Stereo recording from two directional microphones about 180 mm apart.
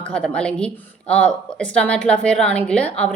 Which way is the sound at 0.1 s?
5° left (ahead or behind).